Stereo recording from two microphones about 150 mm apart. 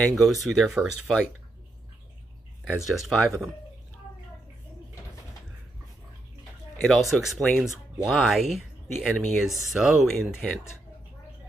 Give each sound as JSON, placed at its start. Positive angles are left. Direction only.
{"t": 0.0, "sound": "speech", "side_deg": 0}
{"t": 2.7, "sound": "speech", "side_deg": -5}
{"t": 6.8, "sound": "speech", "side_deg": 0}